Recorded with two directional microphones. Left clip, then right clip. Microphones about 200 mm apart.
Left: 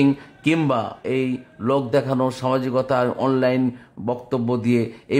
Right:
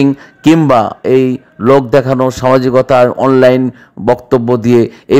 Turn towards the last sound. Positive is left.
turn(degrees=-35)  # may be behind; listen again after turning